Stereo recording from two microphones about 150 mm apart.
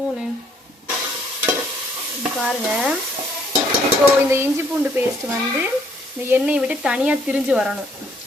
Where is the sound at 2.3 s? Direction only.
Centre (ahead or behind).